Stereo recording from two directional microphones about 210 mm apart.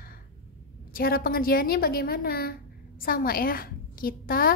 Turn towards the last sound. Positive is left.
turn(degrees=45)  # may be behind; listen again after turning